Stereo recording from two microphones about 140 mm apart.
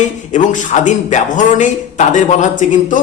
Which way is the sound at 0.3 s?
60° left (ahead or behind).